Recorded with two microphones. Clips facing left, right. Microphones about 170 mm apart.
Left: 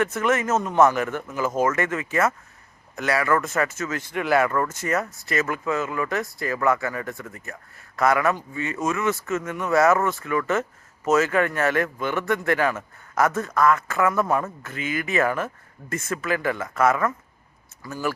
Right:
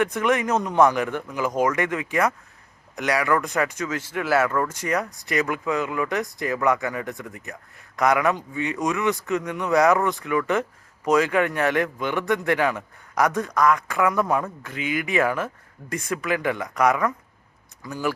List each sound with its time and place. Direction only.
0.0 s speech: 15° right (ahead or behind)